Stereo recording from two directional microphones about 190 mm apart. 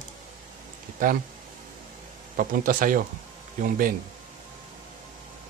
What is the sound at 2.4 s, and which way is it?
Speech, 45° right (ahead or behind).